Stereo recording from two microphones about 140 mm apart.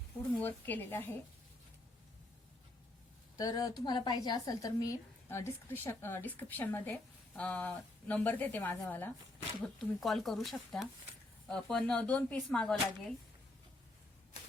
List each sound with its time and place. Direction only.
0.3 s speech: 10° left (ahead or behind)
3.3 s a woman's voice: 25° left (ahead or behind)
9.7 s speech: centre (ahead or behind)